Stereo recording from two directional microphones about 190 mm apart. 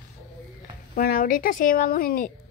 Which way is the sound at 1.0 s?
45° left (ahead or behind).